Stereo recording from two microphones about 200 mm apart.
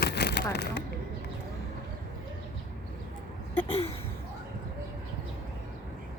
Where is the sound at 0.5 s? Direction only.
55° left (ahead or behind).